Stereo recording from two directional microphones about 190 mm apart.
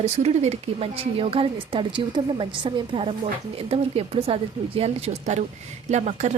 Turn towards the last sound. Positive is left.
turn(degrees=-35)  # may be behind; listen again after turning